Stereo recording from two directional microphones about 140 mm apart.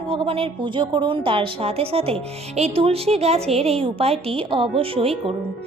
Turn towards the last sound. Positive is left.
turn(degrees=-40)  # may be behind; listen again after turning